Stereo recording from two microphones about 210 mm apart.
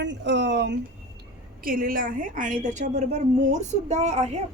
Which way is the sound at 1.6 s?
45° right (ahead or behind).